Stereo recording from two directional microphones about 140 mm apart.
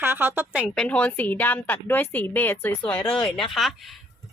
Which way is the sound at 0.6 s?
10° left (ahead or behind).